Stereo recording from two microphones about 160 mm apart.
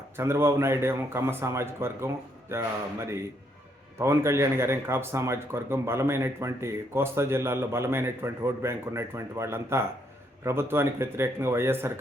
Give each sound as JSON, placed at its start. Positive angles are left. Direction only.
{"t": 0.2, "sound": "speech", "side_deg": -15}